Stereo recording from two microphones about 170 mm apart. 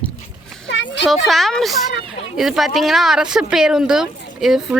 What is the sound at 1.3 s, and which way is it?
Speech, centre (ahead or behind).